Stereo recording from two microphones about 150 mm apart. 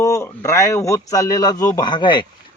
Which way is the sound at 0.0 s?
20° left (ahead or behind).